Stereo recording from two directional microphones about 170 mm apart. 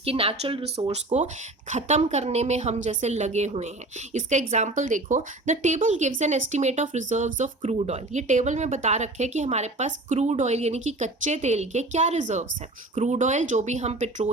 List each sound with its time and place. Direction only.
0.0 s a woman's voice: 35° right (ahead or behind)